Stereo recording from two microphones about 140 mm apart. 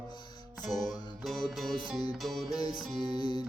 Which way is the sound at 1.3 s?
5° left (ahead or behind).